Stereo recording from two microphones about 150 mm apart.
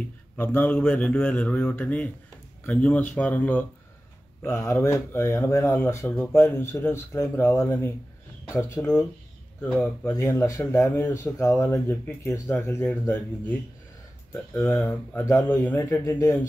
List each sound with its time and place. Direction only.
0.4 s speech: 15° left (ahead or behind)